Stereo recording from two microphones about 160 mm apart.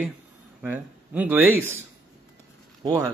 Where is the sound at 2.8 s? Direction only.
20° right (ahead or behind).